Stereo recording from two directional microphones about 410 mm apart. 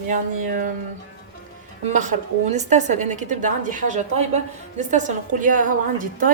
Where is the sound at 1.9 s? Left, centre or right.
Centre.